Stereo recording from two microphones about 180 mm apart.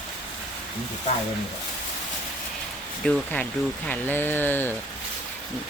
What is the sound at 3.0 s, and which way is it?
Speech, 5° left (ahead or behind).